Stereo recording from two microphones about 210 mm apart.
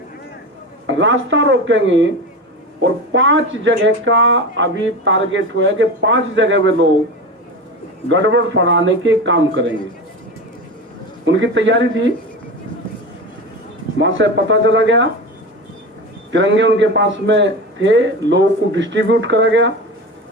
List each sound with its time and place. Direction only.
0.9 s speech: 65° right (ahead or behind)
3.1 s speech: 60° right (ahead or behind)
8.1 s speech: 60° right (ahead or behind)
11.3 s speech: 60° right (ahead or behind)
14.0 s speech: 60° right (ahead or behind)
16.3 s speech: 60° right (ahead or behind)